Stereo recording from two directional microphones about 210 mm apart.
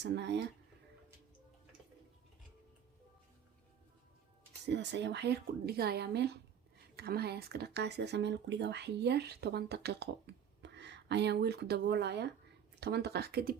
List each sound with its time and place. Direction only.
0.0 s speech: 55° right (ahead or behind)
4.6 s speech: 55° right (ahead or behind)